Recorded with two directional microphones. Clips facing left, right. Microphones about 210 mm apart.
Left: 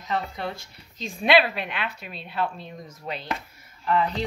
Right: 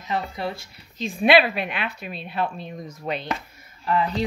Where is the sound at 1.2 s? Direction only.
10° right (ahead or behind).